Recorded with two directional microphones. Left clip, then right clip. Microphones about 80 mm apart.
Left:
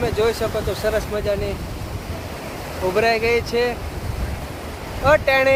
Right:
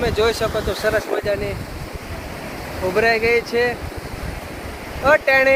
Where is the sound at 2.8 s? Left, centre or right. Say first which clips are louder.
Right 1 dB; left.